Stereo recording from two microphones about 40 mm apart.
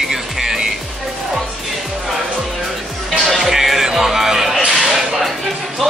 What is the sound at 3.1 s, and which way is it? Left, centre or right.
Music, centre.